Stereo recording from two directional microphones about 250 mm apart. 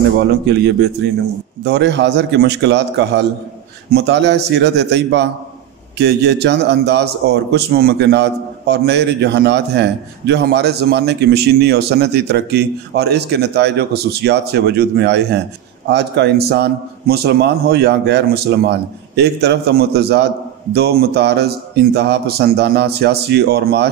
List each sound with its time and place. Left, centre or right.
0.2 s a man's voice: right